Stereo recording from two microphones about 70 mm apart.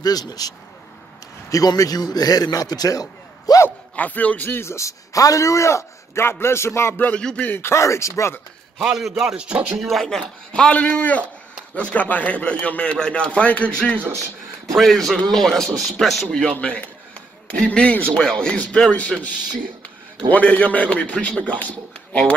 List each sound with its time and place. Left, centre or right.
0.0 s a man's voice: left
3.9 s a man's voice: left
4.5 s a man's voice: left
6.4 s a sound: left
7.2 s speech: centre
7.4 s a man's voice: left
8.7 s a man's voice: centre
9.8 s speech: centre
14.7 s speech: centre
17.6 s a man's voice: centre